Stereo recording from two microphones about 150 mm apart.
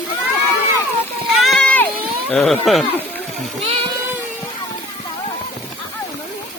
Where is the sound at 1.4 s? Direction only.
5° left (ahead or behind).